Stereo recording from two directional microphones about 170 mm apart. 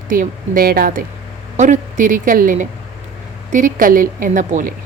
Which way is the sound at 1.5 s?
45° right (ahead or behind).